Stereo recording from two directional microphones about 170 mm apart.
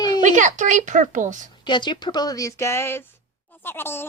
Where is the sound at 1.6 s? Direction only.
25° left (ahead or behind).